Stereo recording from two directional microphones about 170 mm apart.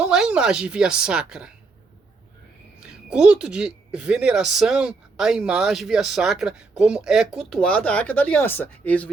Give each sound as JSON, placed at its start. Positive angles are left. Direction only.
{"t": 0.0, "sound": "a woman's voice", "side_deg": -5}
{"t": 2.8, "sound": "a woman's voice", "side_deg": -5}